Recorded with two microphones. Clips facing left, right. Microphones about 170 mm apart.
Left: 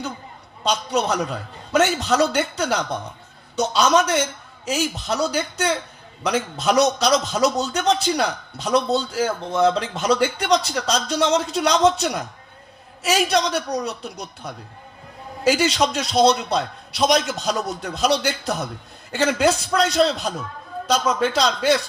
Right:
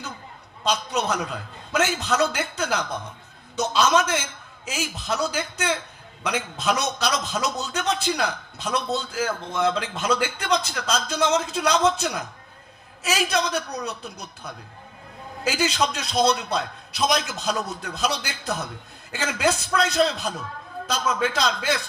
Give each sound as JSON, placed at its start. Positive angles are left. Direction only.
{"t": 0.7, "sound": "speech", "side_deg": 30}